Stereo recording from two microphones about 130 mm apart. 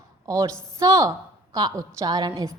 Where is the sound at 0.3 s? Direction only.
25° right (ahead or behind).